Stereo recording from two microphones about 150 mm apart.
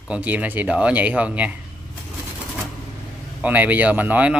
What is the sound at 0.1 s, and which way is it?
Speech, 10° right (ahead or behind).